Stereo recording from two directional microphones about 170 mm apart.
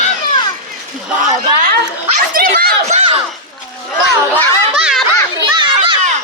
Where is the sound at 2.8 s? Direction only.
40° right (ahead or behind).